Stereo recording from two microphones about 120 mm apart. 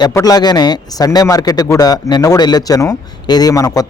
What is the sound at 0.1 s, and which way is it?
A man's voice, 30° left (ahead or behind).